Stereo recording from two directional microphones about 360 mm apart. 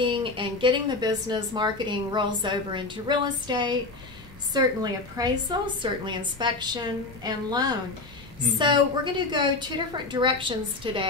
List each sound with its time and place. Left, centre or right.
0.0 s speech: centre
5.1 s speech: centre